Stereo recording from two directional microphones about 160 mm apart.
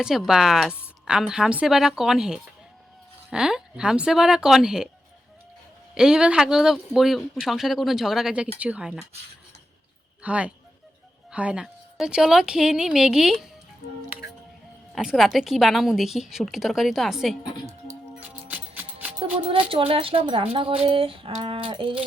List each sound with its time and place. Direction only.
0.0 s speech: 5° right (ahead or behind)
5.9 s speech: 5° right (ahead or behind)
10.2 s speech: 10° right (ahead or behind)
14.9 s speech: centre (ahead or behind)
18.1 s music: 10° right (ahead or behind)
19.2 s speech: 35° right (ahead or behind)